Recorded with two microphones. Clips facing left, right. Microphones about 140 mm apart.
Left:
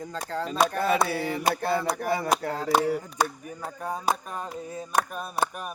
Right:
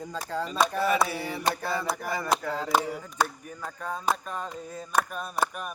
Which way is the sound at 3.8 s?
10° left (ahead or behind).